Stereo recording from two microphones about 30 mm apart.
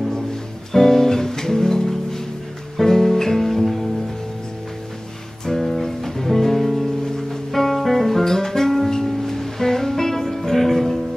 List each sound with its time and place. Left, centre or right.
0.7 s music: centre
5.6 s music: centre